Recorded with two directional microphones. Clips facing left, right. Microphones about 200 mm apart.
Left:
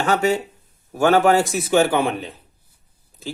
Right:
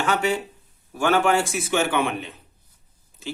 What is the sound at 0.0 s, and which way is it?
Speech, 40° left (ahead or behind).